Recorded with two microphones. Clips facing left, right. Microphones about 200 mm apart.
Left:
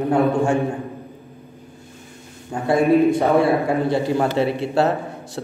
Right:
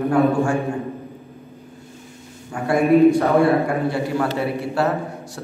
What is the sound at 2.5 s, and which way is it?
Speech, 25° left (ahead or behind).